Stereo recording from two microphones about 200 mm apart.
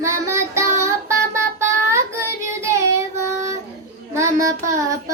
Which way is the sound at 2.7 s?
15° right (ahead or behind).